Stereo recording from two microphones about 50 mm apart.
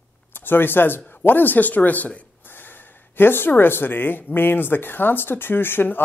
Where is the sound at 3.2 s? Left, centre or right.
Left.